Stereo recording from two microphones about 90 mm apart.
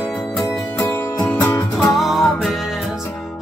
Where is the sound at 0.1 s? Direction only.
5° left (ahead or behind).